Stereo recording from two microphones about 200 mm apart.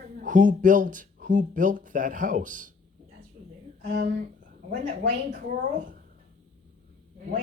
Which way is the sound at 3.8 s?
55° right (ahead or behind).